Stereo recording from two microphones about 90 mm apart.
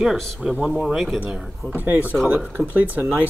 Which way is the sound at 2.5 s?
20° right (ahead or behind).